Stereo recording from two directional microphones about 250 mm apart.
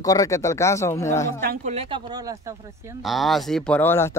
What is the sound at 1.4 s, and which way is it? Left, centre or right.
Speech, right.